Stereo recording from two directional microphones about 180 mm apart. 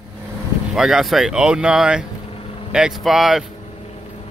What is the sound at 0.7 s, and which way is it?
Speech, 5° right (ahead or behind).